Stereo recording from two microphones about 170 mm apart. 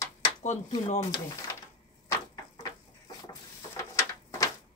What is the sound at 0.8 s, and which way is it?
Speech, 40° left (ahead or behind).